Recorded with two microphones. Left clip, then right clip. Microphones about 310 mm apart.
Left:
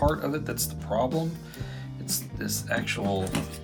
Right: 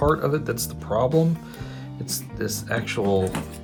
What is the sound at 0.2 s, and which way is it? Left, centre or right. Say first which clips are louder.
Speech: right 6 dB; right.